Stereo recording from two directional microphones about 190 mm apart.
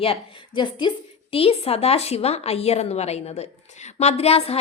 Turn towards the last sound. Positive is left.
turn(degrees=30)  # may be behind; listen again after turning